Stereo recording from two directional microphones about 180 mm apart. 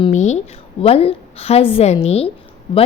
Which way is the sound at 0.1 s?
40° left (ahead or behind).